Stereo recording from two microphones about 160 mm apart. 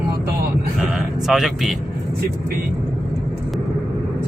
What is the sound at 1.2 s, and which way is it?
Speech, centre (ahead or behind).